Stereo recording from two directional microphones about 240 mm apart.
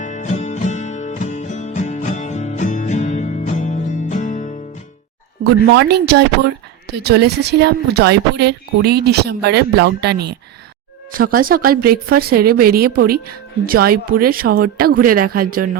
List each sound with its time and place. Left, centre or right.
0.0 s music: left
5.7 s a woman's voice: right